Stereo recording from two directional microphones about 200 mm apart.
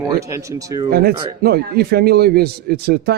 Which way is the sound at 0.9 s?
50° right (ahead or behind).